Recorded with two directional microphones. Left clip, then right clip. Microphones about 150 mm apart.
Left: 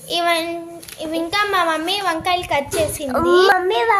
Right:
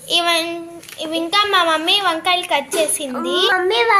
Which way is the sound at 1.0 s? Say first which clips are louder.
Right 3 dB; 5° left (ahead or behind).